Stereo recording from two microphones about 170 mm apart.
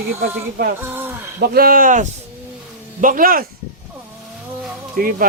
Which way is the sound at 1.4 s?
65° right (ahead or behind).